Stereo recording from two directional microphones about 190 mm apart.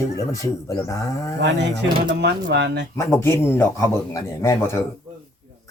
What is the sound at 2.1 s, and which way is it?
Speech, 65° right (ahead or behind).